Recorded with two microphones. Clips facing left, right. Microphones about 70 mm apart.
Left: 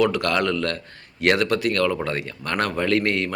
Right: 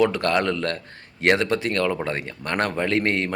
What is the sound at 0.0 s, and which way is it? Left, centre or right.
Speech, right.